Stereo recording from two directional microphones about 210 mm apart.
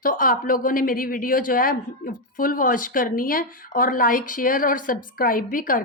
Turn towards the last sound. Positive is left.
turn(degrees=40)  # may be behind; listen again after turning